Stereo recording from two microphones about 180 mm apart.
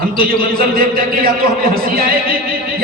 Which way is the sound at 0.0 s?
55° right (ahead or behind).